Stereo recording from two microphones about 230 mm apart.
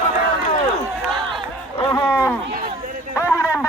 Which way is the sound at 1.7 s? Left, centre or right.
Centre.